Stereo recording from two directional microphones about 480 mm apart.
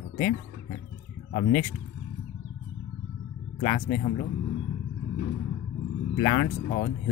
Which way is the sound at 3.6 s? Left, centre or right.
Centre.